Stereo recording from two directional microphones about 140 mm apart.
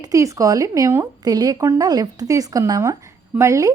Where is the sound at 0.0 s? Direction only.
25° right (ahead or behind).